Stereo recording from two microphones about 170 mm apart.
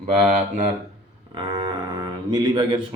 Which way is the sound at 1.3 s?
25° right (ahead or behind).